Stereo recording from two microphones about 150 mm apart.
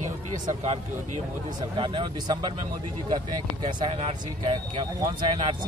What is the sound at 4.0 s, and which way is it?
Speech, 35° right (ahead or behind).